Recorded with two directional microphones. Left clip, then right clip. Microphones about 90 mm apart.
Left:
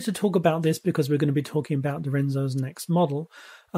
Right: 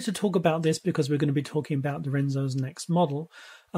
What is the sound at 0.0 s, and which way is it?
Speech, 25° left (ahead or behind).